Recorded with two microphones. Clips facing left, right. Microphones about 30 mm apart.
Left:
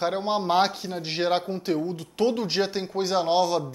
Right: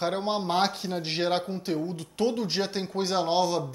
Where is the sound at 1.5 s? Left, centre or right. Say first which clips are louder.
Left 3 dB; centre.